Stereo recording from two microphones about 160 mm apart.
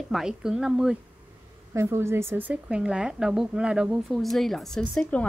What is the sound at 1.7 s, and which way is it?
A woman's voice, 15° right (ahead or behind).